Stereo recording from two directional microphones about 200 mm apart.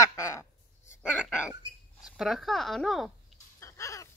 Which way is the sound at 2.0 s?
Centre (ahead or behind).